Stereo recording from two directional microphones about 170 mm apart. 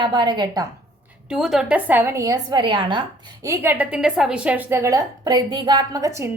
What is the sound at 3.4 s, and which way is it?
A woman's voice, 15° right (ahead or behind).